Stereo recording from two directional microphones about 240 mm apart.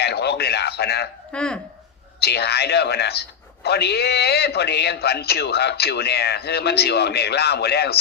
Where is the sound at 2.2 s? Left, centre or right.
Left.